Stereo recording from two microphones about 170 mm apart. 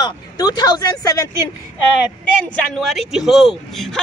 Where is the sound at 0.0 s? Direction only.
25° left (ahead or behind).